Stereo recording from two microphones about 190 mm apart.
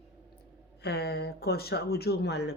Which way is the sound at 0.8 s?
55° left (ahead or behind).